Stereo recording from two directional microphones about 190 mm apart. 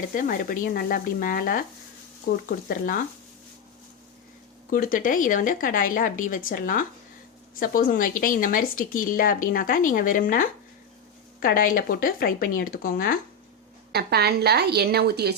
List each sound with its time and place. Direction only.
0.1 s speech: 45° left (ahead or behind)
4.7 s speech: 45° left (ahead or behind)
13.9 s a woman's voice: 55° right (ahead or behind)